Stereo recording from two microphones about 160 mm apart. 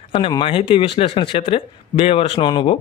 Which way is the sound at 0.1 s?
35° left (ahead or behind).